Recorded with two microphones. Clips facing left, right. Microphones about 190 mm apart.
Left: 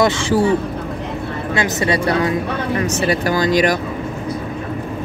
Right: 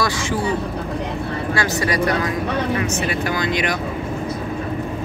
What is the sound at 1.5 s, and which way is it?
Speech, 20° left (ahead or behind).